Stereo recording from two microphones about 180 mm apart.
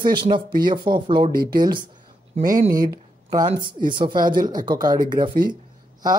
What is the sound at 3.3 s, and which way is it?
Speech, 25° right (ahead or behind).